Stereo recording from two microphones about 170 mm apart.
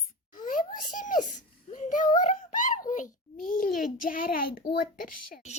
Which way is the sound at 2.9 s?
50° left (ahead or behind).